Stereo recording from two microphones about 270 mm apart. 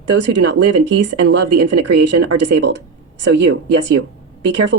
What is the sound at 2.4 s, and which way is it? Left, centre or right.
Speech, right.